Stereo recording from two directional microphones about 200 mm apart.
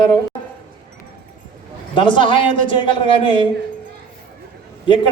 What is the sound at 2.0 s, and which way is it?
A man's voice, 25° left (ahead or behind).